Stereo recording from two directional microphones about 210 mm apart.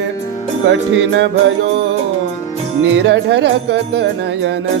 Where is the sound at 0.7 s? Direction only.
60° right (ahead or behind).